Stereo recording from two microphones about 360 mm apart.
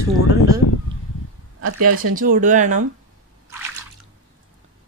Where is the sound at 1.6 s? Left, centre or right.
Right.